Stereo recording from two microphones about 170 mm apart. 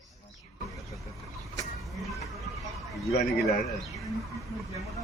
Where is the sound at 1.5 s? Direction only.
Centre (ahead or behind).